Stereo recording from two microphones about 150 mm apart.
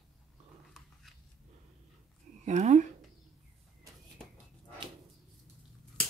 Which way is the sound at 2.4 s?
50° right (ahead or behind).